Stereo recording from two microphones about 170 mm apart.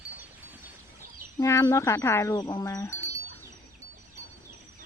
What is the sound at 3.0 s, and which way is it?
Wind chime, 15° right (ahead or behind).